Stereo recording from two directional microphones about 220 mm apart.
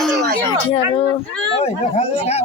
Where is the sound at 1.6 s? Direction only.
30° left (ahead or behind).